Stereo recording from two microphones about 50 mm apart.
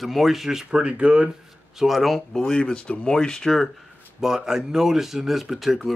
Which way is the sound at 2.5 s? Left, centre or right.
Centre.